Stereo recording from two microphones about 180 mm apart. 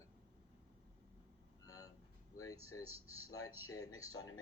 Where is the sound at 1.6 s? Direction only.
20° left (ahead or behind).